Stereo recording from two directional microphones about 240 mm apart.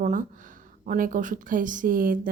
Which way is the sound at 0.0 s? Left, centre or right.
Right.